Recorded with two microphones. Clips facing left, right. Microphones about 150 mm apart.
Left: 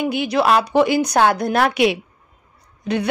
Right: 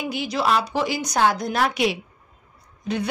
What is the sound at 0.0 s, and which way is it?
Speech, 60° left (ahead or behind).